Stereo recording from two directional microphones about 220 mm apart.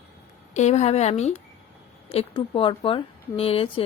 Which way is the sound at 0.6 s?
30° left (ahead or behind).